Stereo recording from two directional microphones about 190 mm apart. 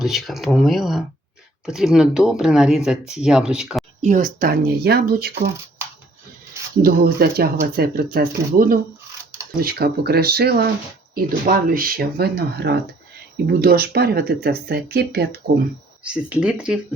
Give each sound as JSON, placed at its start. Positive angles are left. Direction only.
{"t": 0.0, "sound": "speech", "side_deg": 0}
{"t": 4.0, "sound": "speech", "side_deg": -40}
{"t": 6.8, "sound": "speech", "side_deg": -55}
{"t": 16.0, "sound": "speech", "side_deg": -5}